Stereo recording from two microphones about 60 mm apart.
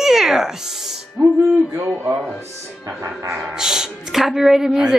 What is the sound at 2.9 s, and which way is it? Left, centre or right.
Speech, right.